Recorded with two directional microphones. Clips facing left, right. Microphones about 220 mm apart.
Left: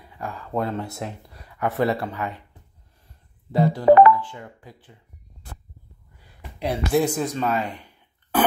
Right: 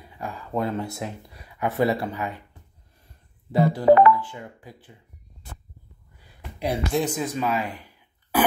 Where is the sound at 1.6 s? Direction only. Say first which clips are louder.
Even; 10° right (ahead or behind).